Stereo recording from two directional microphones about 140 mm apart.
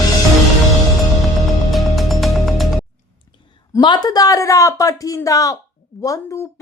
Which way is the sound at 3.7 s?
35° left (ahead or behind).